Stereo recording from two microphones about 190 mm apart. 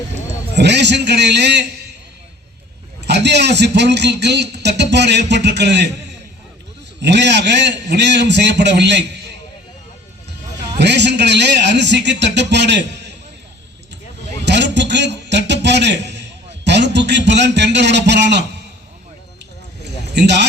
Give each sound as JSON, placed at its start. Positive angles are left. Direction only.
{"t": 0.5, "sound": "a man's voice", "side_deg": -65}
{"t": 3.1, "sound": "a man's voice", "side_deg": -60}
{"t": 7.0, "sound": "a man's voice", "side_deg": -65}
{"t": 10.8, "sound": "a man's voice", "side_deg": -65}
{"t": 14.4, "sound": "a sound", "side_deg": -65}
{"t": 16.6, "sound": "a man's voice", "side_deg": -65}
{"t": 20.1, "sound": "a man's voice", "side_deg": -65}